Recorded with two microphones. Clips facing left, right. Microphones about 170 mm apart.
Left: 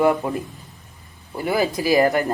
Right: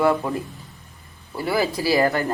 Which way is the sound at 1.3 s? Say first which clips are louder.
Left 1 dB; 20° left (ahead or behind).